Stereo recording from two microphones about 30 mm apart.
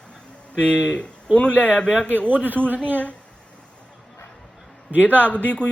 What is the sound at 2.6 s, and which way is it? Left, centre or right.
Speech, right.